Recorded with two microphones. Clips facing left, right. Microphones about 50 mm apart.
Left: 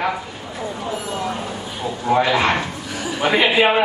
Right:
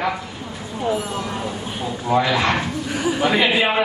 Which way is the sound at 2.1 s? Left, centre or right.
Centre.